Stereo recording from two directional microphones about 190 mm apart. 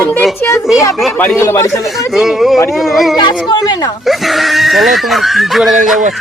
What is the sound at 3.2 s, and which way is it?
Speech, 25° left (ahead or behind).